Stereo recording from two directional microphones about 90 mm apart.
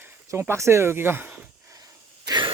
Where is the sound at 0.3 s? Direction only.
30° right (ahead or behind).